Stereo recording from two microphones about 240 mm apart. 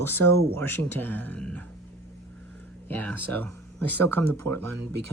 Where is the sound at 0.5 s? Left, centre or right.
Centre.